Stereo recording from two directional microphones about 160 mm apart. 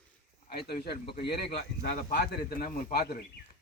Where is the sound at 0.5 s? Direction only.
80° left.